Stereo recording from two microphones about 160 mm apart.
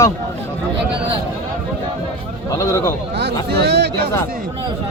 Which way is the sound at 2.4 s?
20° left (ahead or behind).